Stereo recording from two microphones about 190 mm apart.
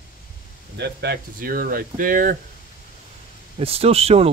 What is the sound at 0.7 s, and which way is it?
Speech, 60° right (ahead or behind).